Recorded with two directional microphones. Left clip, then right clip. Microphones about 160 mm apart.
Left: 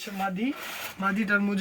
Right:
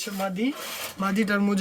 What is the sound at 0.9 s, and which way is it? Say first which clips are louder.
Speech: even; 65° right (ahead or behind).